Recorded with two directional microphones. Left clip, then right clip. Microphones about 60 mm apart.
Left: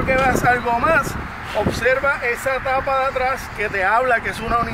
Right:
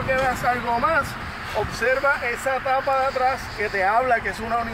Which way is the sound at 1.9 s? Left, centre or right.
Left.